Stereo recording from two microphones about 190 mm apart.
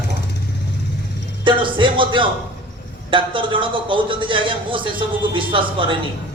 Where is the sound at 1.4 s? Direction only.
25° right (ahead or behind).